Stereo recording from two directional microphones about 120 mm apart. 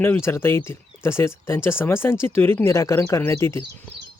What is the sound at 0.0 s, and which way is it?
Speech, 20° left (ahead or behind).